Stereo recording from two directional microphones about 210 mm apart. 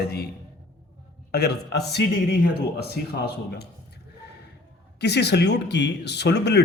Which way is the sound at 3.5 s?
50° left (ahead or behind).